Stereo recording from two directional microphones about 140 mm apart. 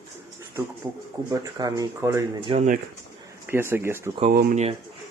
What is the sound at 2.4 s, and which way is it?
Speech, 45° right (ahead or behind).